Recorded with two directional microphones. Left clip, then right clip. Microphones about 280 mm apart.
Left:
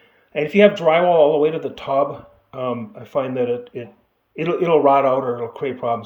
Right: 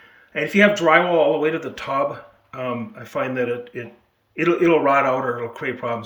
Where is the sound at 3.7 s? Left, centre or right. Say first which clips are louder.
Left 1 dB; left.